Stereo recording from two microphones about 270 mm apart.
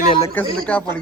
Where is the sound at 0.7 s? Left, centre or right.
Centre.